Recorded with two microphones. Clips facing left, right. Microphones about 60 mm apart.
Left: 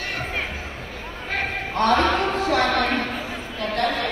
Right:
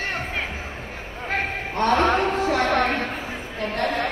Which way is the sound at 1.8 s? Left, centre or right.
Right.